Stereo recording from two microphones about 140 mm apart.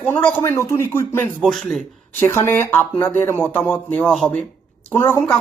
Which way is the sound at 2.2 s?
15° left (ahead or behind).